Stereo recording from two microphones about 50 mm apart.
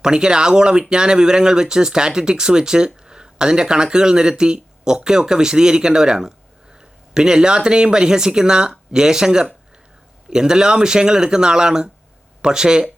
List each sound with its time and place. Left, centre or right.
0.0 s speech: centre